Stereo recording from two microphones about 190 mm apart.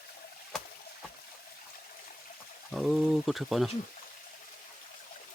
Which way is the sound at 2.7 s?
Centre (ahead or behind).